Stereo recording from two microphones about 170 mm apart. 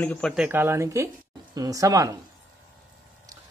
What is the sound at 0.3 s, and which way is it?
Speech, 10° right (ahead or behind).